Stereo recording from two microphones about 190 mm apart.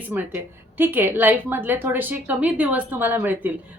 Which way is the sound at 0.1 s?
10° right (ahead or behind).